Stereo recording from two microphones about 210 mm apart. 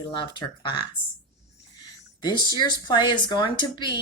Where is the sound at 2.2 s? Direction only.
20° left (ahead or behind).